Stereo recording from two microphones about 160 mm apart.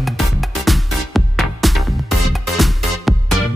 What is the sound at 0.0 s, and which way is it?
Music, centre (ahead or behind).